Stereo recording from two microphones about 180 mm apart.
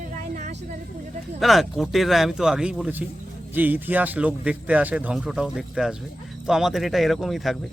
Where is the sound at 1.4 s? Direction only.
Centre (ahead or behind).